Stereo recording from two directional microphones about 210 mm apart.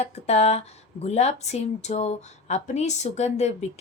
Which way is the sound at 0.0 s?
30° left (ahead or behind).